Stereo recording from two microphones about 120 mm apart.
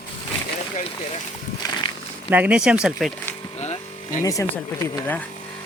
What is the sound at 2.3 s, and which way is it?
Speech, 10° right (ahead or behind).